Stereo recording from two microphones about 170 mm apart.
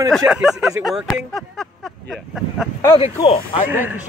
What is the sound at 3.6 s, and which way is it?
Speech, 10° right (ahead or behind).